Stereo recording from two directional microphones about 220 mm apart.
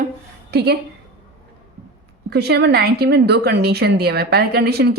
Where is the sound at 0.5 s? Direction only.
45° right (ahead or behind).